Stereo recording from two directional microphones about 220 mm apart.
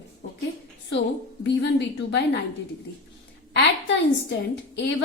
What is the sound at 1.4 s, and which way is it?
Speech, 50° left (ahead or behind).